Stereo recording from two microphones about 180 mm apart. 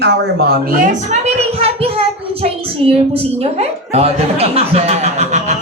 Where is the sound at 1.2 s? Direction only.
35° right (ahead or behind).